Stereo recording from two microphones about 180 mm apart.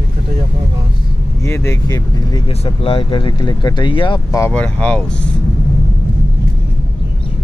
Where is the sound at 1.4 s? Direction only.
15° left (ahead or behind).